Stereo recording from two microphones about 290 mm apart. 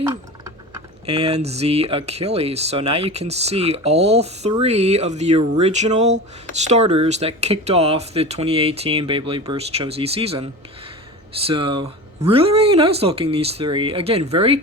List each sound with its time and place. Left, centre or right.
1.0 s speech: centre